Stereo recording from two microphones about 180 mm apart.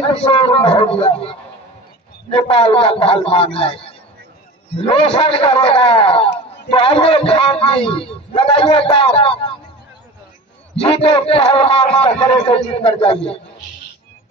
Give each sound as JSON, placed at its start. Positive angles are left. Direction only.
{"t": 0.1, "sound": "a man's voice", "side_deg": 30}
{"t": 2.3, "sound": "a man's voice", "side_deg": 30}
{"t": 10.8, "sound": "a man's voice", "side_deg": 30}